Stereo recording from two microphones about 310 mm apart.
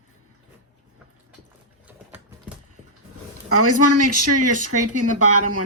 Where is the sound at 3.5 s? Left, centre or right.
Right.